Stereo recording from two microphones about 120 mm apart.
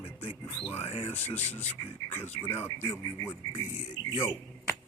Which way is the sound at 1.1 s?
15° left (ahead or behind).